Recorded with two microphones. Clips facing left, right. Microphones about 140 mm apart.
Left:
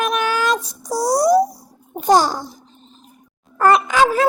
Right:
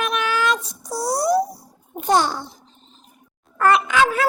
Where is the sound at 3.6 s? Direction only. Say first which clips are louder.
Left 3 dB; 35° left (ahead or behind).